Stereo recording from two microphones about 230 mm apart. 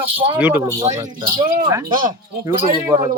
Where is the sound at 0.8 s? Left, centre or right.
Right.